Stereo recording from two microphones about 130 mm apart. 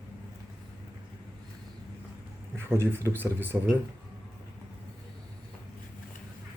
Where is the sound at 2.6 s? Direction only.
20° right (ahead or behind).